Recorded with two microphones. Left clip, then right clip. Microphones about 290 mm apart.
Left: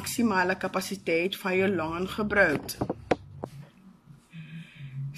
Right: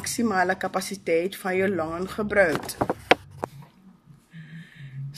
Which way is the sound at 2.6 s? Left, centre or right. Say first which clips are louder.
Right 8 dB; right.